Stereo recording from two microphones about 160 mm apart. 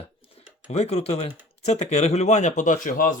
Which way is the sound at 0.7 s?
40° left (ahead or behind).